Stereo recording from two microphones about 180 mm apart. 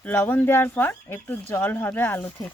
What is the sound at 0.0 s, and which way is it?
Speech, 10° left (ahead or behind).